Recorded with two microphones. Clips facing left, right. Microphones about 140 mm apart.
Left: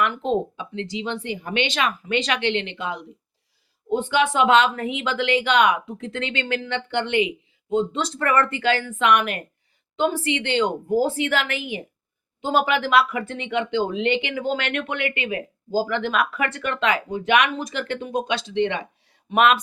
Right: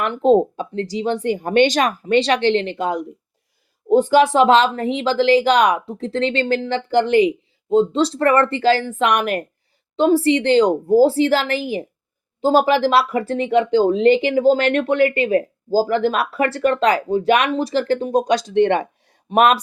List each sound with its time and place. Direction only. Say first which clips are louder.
0.0 s speech: right 8 dB; 40° right (ahead or behind)